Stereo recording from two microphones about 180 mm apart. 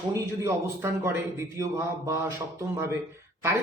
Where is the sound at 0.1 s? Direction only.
15° right (ahead or behind).